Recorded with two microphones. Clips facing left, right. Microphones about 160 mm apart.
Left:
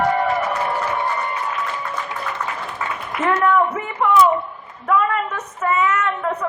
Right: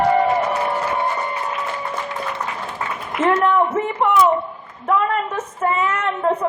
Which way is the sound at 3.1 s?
25° right (ahead or behind).